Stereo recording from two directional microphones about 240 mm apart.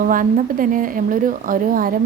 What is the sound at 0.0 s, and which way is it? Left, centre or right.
Speech, right.